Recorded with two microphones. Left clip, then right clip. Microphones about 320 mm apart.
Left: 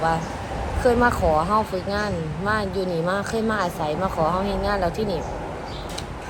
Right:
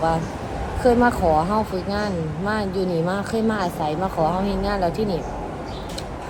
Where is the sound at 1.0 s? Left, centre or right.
Centre.